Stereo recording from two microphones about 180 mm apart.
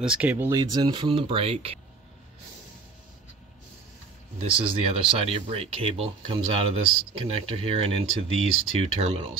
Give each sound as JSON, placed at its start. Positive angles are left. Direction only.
{"t": 0.0, "sound": "speech", "side_deg": -10}
{"t": 4.4, "sound": "speech", "side_deg": -30}